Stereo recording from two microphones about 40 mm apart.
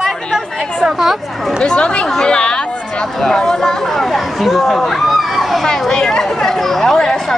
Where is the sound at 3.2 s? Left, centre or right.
Centre.